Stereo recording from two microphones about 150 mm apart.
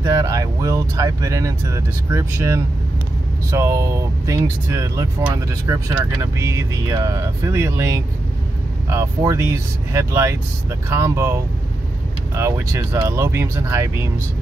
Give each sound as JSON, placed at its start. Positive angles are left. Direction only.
{"t": 0.0, "sound": "speech", "side_deg": -25}
{"t": 12.4, "sound": "speech", "side_deg": -15}